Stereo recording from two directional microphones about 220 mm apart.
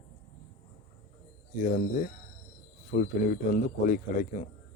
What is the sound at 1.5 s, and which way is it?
Speech, 40° left (ahead or behind).